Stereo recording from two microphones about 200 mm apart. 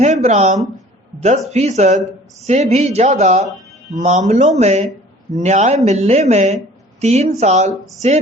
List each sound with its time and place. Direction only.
0.0 s speech: 35° right (ahead or behind)